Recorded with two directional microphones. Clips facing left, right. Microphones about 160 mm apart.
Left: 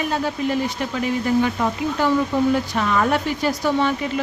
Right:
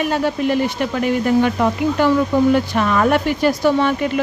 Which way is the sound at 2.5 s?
65° right (ahead or behind).